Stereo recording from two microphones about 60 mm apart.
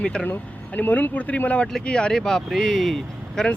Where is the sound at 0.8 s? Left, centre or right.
Left; by 3.5 s centre.